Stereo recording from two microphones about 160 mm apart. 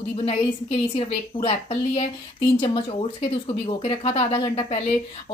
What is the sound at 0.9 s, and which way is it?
Speech, 35° left (ahead or behind).